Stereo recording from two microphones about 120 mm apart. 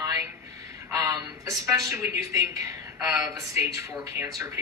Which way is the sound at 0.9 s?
30° right (ahead or behind).